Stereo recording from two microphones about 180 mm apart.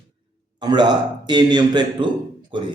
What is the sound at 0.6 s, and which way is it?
A man's voice, 25° right (ahead or behind).